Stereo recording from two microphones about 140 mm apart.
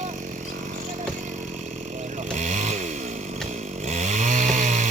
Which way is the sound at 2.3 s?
60° right (ahead or behind).